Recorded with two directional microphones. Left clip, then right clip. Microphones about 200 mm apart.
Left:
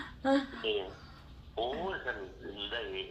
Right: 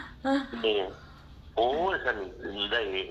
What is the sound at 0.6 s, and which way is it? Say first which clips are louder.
A man's voice: right 7 dB; 55° right (ahead or behind).